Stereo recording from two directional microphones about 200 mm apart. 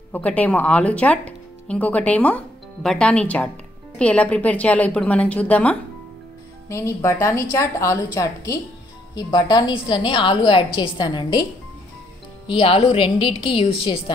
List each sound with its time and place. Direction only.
0.1 s a woman's voice: 5° left (ahead or behind)
12.4 s a woman's voice: 25° left (ahead or behind)